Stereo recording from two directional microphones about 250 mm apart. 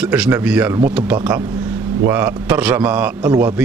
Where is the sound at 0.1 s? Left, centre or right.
Centre.